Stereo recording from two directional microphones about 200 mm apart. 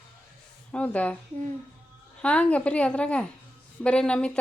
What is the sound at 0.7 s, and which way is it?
Speech, 5° left (ahead or behind).